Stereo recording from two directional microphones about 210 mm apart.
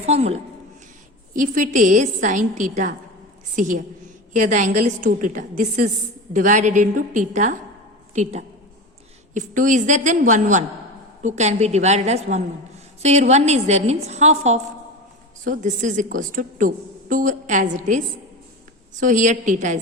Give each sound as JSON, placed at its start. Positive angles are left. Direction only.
{"t": 0.0, "sound": "a woman's voice", "side_deg": -30}